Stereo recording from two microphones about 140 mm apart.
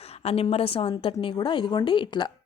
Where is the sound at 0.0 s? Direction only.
45° left (ahead or behind).